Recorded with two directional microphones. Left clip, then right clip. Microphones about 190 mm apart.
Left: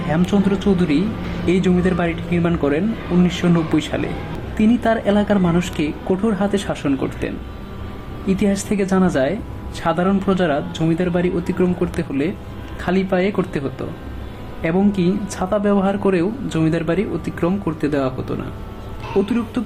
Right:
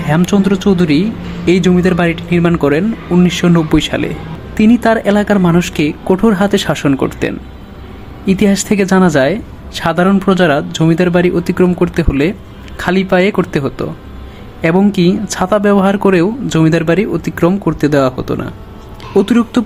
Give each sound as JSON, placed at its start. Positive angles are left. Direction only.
{"t": 0.1, "sound": "speech", "side_deg": -30}